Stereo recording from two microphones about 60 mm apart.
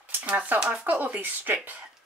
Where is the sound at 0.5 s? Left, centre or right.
Centre.